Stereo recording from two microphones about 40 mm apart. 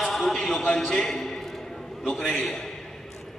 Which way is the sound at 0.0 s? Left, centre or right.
Centre.